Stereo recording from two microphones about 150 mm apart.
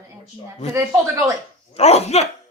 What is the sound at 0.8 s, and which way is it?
Speech, 20° right (ahead or behind).